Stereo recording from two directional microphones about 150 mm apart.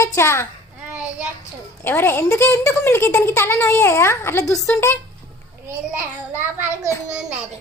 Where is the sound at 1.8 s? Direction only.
15° left (ahead or behind).